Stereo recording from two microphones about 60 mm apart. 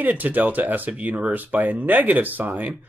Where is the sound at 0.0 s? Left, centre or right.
Right.